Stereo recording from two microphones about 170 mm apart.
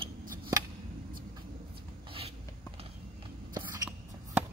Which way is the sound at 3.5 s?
20° right (ahead or behind).